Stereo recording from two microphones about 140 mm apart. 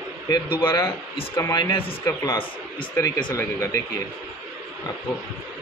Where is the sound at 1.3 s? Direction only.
20° left (ahead or behind).